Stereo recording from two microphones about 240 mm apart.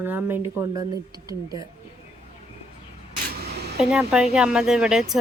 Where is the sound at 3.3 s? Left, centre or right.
Right.